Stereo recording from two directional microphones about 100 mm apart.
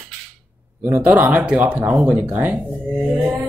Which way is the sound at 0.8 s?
20° right (ahead or behind).